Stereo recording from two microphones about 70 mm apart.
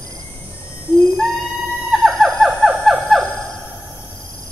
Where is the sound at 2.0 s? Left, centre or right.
Centre.